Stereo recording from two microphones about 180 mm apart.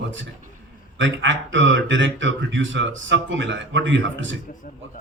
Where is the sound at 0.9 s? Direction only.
90° right.